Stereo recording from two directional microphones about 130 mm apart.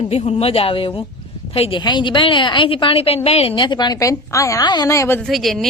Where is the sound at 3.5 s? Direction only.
35° left (ahead or behind).